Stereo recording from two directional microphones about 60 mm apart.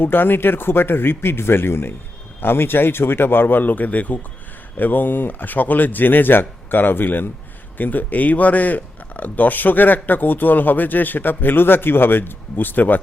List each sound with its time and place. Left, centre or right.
0.0 s speech: left